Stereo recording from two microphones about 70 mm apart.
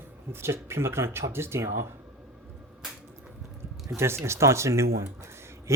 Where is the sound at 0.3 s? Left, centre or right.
Right.